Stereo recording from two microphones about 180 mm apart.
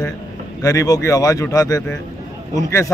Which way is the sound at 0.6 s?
20° left (ahead or behind).